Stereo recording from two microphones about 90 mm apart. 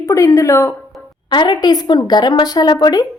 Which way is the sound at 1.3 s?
55° left (ahead or behind).